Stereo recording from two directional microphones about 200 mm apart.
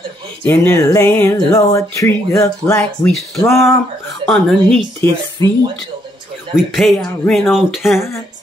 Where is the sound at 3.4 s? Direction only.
15° left (ahead or behind).